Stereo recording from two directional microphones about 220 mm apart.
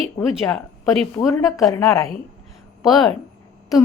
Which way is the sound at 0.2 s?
10° left (ahead or behind).